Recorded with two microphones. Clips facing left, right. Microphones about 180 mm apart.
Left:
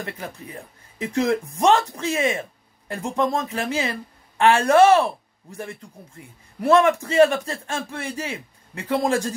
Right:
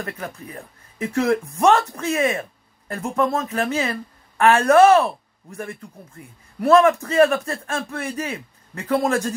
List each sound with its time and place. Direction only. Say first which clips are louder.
0.0 s a man's voice: right 2 dB; 30° left (ahead or behind)